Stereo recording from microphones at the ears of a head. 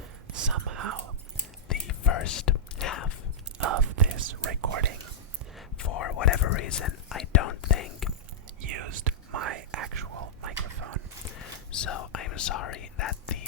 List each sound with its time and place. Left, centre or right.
0.0 s whispering: right
1.6 s whispering: left
3.6 s whispering: right
5.7 s whispering: left
8.6 s whispering: right
11.3 s whispering: left